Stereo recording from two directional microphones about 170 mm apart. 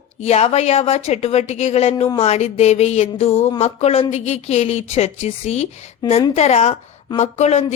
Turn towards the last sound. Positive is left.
turn(degrees=40)  # may be behind; listen again after turning